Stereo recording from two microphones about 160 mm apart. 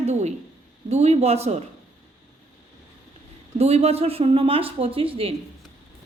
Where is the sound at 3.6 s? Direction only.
40° right (ahead or behind).